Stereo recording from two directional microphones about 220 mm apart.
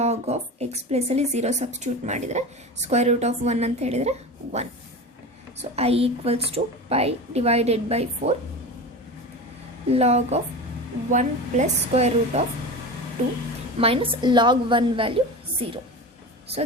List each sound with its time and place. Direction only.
0.0 s a woman's voice: 30° right (ahead or behind)
9.9 s a woman's voice: 30° right (ahead or behind)
13.7 s a woman's voice: 25° right (ahead or behind)